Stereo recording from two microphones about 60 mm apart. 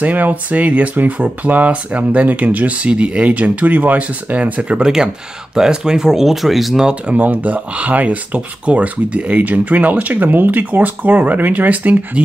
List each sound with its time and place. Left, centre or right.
0.0 s speech: right; by 6.9 s centre
6.9 s speech: right